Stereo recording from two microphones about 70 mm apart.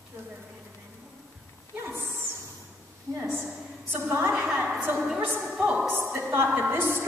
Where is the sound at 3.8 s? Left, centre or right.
Right.